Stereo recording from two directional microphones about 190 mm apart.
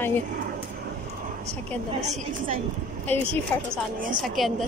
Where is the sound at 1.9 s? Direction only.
35° right (ahead or behind).